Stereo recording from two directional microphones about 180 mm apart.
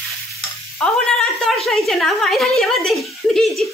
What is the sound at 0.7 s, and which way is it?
A woman's voice, 5° left (ahead or behind).